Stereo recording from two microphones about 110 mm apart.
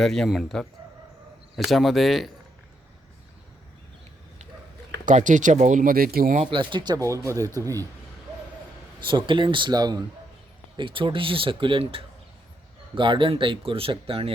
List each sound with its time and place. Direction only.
0.0 s speech: 5° left (ahead or behind)
5.1 s speech: 90° right
6.4 s speech: 50° right (ahead or behind)
7.0 s speech: 25° right (ahead or behind)
9.0 s speech: 45° right (ahead or behind)
10.8 s speech: 50° right (ahead or behind)